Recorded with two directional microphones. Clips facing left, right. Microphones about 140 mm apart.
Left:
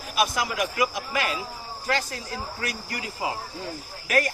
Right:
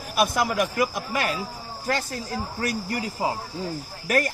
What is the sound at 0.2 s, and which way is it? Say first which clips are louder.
A man's voice: right 3 dB; 55° right (ahead or behind).